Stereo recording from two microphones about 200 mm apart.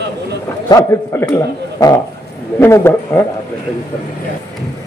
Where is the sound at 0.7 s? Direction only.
15° left (ahead or behind).